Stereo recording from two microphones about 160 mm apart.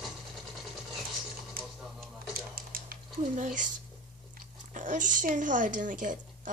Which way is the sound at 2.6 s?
65° right (ahead or behind).